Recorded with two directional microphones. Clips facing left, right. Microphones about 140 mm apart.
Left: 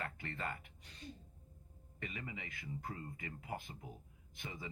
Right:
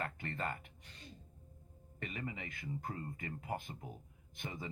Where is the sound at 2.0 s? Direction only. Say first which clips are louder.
Right 3 dB; 50° right (ahead or behind).